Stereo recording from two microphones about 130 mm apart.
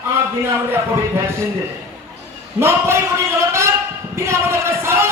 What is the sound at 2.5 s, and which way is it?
Speech, 20° right (ahead or behind).